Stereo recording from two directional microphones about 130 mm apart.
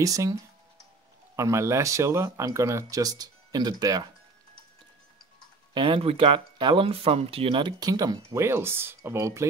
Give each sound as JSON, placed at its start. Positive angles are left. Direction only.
{"t": 0.0, "sound": "speech", "side_deg": -25}
{"t": 5.8, "sound": "speech", "side_deg": -45}